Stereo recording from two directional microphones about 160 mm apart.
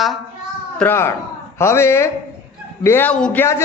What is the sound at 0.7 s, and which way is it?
A woman's voice, 15° left (ahead or behind).